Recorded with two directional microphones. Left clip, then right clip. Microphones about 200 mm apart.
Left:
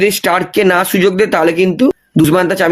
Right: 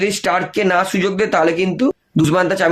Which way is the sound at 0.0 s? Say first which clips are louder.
Left 5 dB; 45° left (ahead or behind).